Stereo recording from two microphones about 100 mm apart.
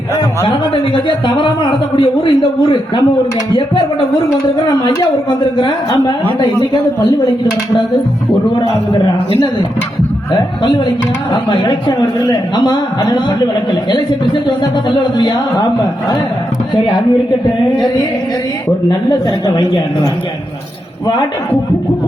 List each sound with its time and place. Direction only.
0.4 s speech: 50° left (ahead or behind)
4.4 s speech: 40° left (ahead or behind)
8.5 s speech: 50° left (ahead or behind)
10.6 s speech: 50° left (ahead or behind)